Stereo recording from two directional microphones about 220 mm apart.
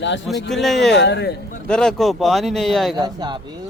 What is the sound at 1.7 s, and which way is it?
Speech, centre (ahead or behind).